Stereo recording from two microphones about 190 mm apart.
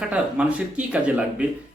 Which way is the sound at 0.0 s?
5° right (ahead or behind).